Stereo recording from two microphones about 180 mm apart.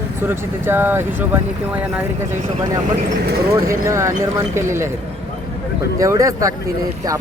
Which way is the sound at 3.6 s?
15° right (ahead or behind).